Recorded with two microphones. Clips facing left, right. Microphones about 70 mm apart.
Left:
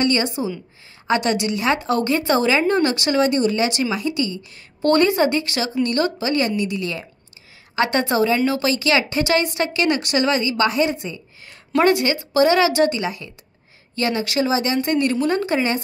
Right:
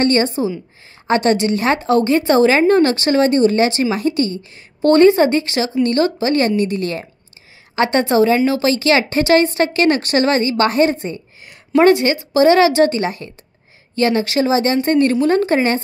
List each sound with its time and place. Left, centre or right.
0.0 s speech: right
1.9 s speech: right
2.5 s a woman's voice: right
4.4 s speech: right
6.3 s a woman's voice: right
7.7 s speech: right
11.8 s speech: right